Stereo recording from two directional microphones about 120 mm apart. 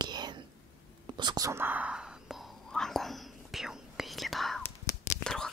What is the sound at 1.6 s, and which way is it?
Whispering, 15° right (ahead or behind).